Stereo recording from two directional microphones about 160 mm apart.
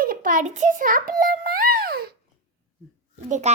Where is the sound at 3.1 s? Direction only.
45° right (ahead or behind).